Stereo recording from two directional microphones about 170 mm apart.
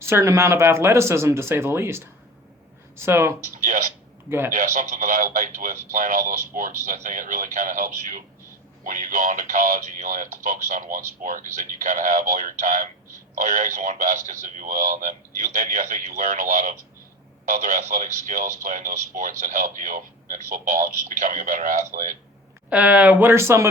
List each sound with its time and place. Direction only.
0.0 s speech: 15° right (ahead or behind)
3.6 s speech: 50° right (ahead or behind)
4.3 s speech: 15° right (ahead or behind)
4.5 s speech: 50° right (ahead or behind)
22.7 s speech: 10° right (ahead or behind)